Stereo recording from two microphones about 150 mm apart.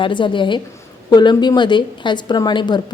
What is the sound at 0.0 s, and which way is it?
A woman's voice, 30° left (ahead or behind).